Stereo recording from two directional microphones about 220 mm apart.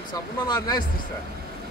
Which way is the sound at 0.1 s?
20° left (ahead or behind).